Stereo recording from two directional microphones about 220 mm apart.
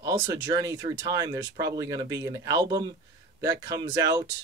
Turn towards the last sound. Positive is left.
turn(degrees=-15)  # may be behind; listen again after turning